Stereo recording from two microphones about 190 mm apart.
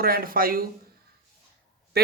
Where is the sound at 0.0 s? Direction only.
50° right (ahead or behind).